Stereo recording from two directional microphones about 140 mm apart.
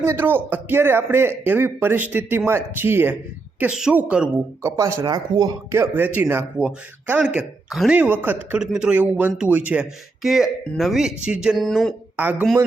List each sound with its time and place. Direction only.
0.0 s speech: 15° right (ahead or behind)
5.7 s speech: 15° right (ahead or behind)